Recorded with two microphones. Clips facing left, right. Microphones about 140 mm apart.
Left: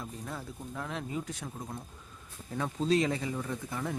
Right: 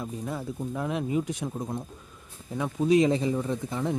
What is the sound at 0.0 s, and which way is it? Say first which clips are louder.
Speech: right 7 dB; 10° right (ahead or behind).